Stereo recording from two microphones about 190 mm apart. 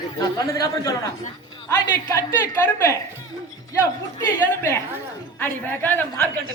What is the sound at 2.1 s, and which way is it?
Speech, 15° left (ahead or behind).